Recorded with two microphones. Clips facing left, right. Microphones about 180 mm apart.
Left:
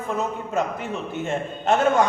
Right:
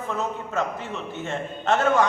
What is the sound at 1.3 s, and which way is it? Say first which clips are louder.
Speech: left 2 dB; 15° left (ahead or behind).